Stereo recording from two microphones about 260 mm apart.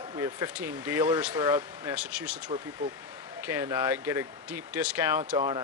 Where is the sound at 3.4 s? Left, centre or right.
Centre.